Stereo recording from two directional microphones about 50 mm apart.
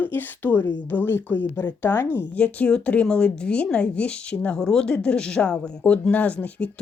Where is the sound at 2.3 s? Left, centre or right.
Left.